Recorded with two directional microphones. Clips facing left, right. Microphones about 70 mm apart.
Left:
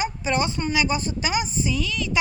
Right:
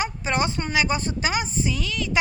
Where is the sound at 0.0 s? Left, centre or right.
Right.